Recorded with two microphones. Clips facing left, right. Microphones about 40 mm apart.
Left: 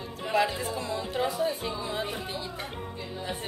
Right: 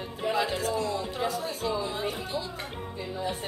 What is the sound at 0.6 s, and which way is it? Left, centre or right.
Speech, left.